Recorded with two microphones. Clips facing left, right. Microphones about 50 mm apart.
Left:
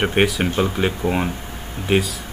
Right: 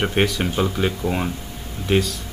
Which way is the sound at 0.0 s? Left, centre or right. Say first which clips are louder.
Left 2 dB; centre.